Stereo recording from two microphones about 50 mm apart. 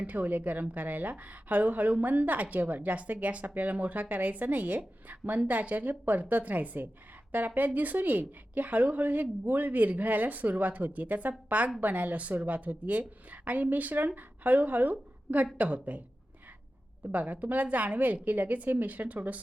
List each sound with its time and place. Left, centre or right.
0.0 s a woman's voice: right
17.1 s a woman's voice: right